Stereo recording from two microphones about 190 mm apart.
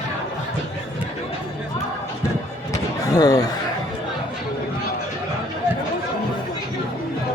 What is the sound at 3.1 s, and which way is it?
Speech, 20° left (ahead or behind).